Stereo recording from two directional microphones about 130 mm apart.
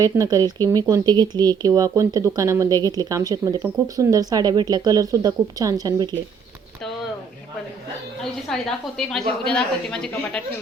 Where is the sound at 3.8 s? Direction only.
25° right (ahead or behind).